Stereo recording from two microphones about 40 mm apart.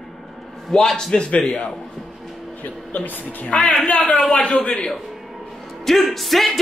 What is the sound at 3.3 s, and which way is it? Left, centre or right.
Speech, left.